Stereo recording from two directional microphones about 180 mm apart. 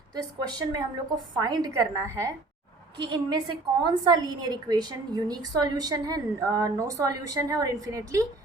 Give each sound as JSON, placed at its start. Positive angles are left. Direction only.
{"t": 0.1, "sound": "a woman's voice", "side_deg": -20}